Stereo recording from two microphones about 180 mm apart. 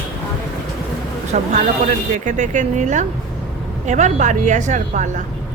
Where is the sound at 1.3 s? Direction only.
40° right (ahead or behind).